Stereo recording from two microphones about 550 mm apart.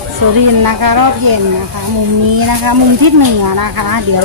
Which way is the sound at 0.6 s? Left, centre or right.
Right.